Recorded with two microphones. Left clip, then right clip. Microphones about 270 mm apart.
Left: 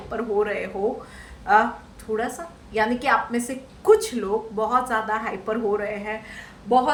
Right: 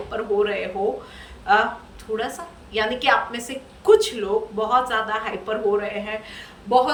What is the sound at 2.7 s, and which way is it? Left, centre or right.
A woman's voice, centre.